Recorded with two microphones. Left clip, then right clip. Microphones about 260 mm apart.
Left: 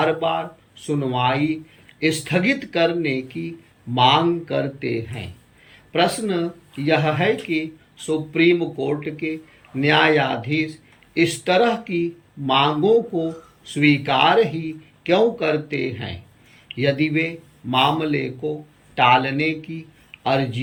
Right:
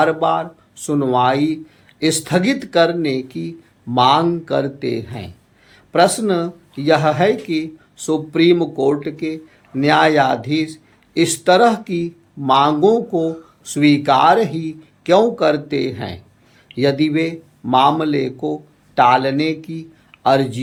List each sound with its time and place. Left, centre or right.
0.0 s speech: centre